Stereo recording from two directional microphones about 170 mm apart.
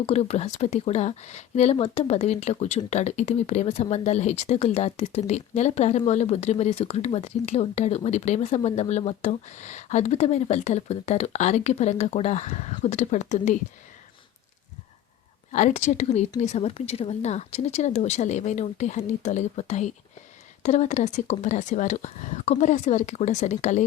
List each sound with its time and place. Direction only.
0.0 s speech: 40° left (ahead or behind)
15.5 s speech: 45° left (ahead or behind)